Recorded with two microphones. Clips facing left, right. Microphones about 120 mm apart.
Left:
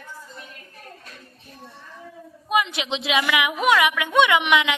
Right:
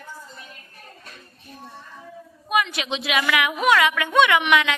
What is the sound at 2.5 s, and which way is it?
A woman's voice, 20° left (ahead or behind).